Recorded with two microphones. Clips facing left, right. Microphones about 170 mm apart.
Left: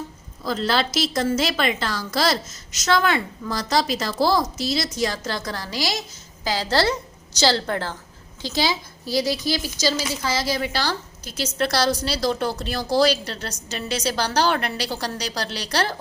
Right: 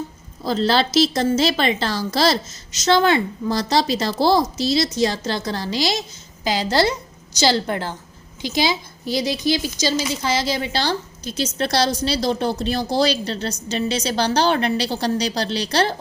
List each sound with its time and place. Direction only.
0.4 s a woman's voice: 30° right (ahead or behind)